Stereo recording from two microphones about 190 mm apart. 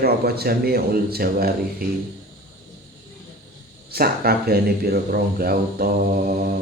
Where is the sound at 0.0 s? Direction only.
55° right (ahead or behind).